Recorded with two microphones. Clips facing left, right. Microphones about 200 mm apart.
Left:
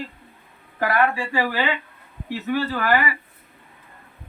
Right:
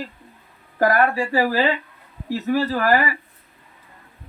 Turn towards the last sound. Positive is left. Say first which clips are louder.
# right 3 dB
turn(degrees=-40)  # may be behind; listen again after turning